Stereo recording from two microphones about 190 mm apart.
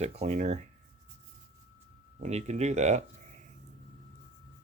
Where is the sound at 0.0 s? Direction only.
35° right (ahead or behind).